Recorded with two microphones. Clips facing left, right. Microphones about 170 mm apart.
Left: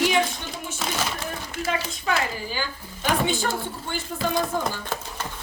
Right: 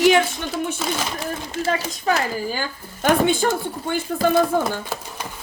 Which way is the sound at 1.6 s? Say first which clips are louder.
Right 5 dB; 40° right (ahead or behind).